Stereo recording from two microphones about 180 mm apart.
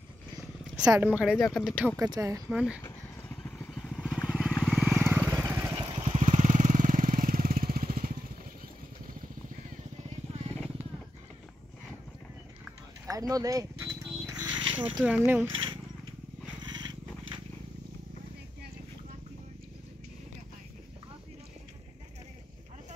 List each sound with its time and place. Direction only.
0.7 s a woman's voice: 5° right (ahead or behind)
1.4 s a woman's voice: 5° left (ahead or behind)
2.0 s speech: 20° right (ahead or behind)
2.5 s a woman's voice: 5° right (ahead or behind)
2.8 s vehicle: 10° left (ahead or behind)
4.9 s vehicle: 10° right (ahead or behind)
6.2 s vehicle: 40° right (ahead or behind)
13.0 s pulleys: 20° right (ahead or behind)
15.0 s speech: 10° right (ahead or behind)
16.6 s a sound: 25° right (ahead or behind)